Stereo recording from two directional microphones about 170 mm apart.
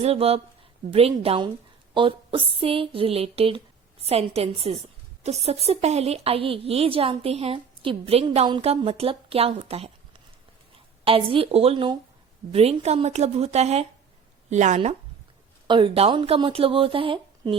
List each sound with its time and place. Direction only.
0.0 s a woman's voice: 35° right (ahead or behind)
11.0 s a woman's voice: 35° right (ahead or behind)
15.6 s a woman's voice: 30° right (ahead or behind)